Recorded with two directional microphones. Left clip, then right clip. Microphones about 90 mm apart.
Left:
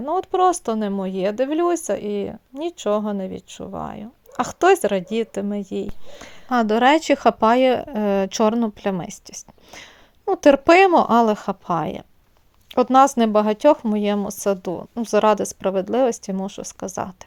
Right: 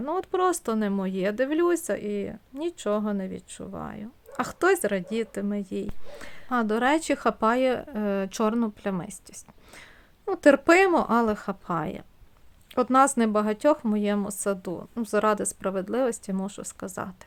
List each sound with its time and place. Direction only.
0.0 s speech: 20° left (ahead or behind)
2.0 s speech: 30° left (ahead or behind)
6.5 s a woman's voice: 55° left (ahead or behind); by 17.2 s 35° left (ahead or behind)